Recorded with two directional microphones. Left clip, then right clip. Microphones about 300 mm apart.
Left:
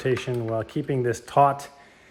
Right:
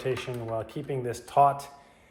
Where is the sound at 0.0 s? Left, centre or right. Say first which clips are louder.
Left 6 dB; left.